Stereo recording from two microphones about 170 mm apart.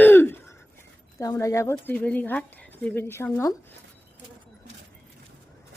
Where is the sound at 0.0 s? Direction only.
10° left (ahead or behind).